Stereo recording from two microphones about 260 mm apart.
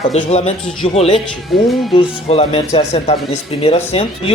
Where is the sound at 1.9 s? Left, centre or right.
Left.